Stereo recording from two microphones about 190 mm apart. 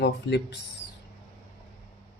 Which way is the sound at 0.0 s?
65° left (ahead or behind).